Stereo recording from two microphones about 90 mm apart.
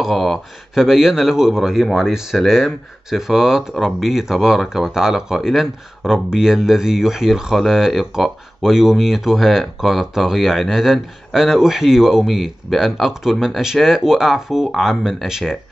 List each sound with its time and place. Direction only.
0.0 s speech: centre (ahead or behind)